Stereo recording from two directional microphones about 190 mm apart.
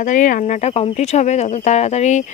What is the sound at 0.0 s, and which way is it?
Speech, 40° left (ahead or behind).